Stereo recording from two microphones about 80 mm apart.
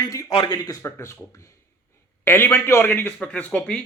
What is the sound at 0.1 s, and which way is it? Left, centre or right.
Speech, left.